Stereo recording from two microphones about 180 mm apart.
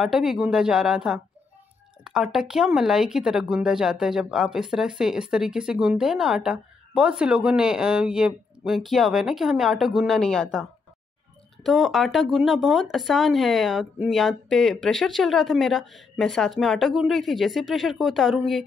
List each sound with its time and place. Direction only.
0.0 s speech: centre (ahead or behind)